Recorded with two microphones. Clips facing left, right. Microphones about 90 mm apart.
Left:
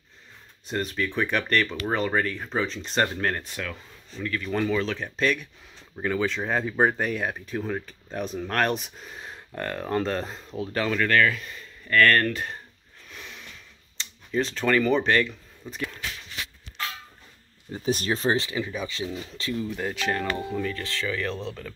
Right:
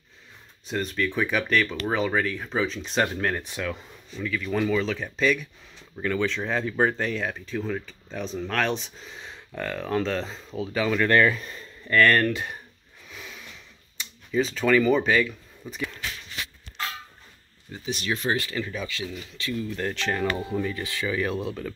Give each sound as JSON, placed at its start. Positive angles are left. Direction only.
{"t": 0.7, "sound": "speech", "side_deg": 0}
{"t": 3.4, "sound": "speech", "side_deg": -15}
{"t": 4.2, "sound": "speech", "side_deg": 0}
{"t": 11.1, "sound": "speech", "side_deg": -20}
{"t": 11.9, "sound": "speech", "side_deg": -15}
{"t": 13.1, "sound": "a sound", "side_deg": 0}
{"t": 14.3, "sound": "speech", "side_deg": 0}
{"t": 17.7, "sound": "speech", "side_deg": 40}
{"t": 18.5, "sound": "speech", "side_deg": 15}
{"t": 18.9, "sound": "speech", "side_deg": 30}
{"t": 19.7, "sound": "speech", "side_deg": 5}
{"t": 20.2, "sound": "speech", "side_deg": -10}